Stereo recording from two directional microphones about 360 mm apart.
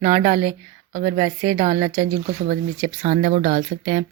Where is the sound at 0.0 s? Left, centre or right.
Right.